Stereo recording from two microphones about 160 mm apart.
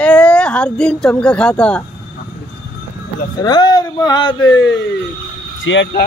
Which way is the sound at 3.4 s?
25° left (ahead or behind).